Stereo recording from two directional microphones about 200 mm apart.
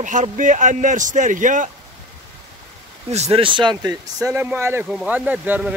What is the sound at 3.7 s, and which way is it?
Speech, 20° right (ahead or behind).